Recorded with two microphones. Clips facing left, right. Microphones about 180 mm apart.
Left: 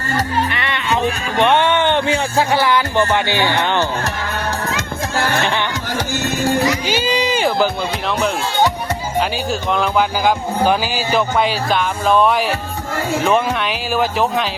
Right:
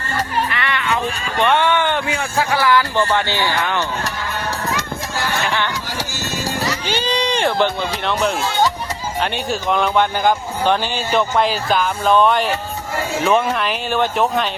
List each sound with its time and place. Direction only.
0.5 s music: 20° left (ahead or behind)
1.4 s speech: 20° left (ahead or behind)
6.7 s a man's voice: 10° left (ahead or behind)